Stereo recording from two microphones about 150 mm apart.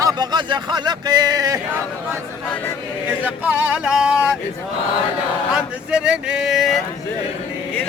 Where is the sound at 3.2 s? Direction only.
10° right (ahead or behind).